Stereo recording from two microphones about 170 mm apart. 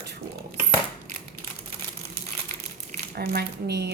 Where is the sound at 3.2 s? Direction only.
75° right (ahead or behind).